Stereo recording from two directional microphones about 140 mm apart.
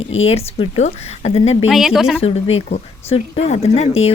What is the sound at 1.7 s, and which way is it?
Speech, 5° right (ahead or behind).